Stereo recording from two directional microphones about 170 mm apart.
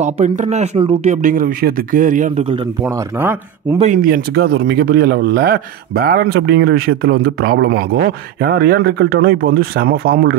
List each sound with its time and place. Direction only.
0.0 s speech: 45° right (ahead or behind)
2.8 s speech: 10° right (ahead or behind)
3.8 s a man's voice: 50° right (ahead or behind)